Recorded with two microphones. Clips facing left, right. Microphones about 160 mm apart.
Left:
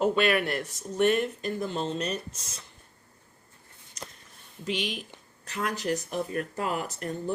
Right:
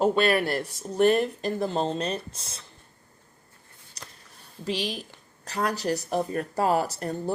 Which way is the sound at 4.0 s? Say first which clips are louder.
Left 4 dB; 35° right (ahead or behind).